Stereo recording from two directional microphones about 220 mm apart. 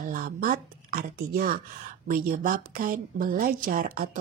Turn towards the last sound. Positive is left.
turn(degrees=-40)  # may be behind; listen again after turning